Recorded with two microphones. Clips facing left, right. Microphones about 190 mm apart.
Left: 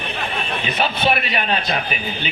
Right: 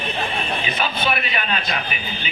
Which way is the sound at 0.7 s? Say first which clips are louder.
Left 6 dB; 35° left (ahead or behind).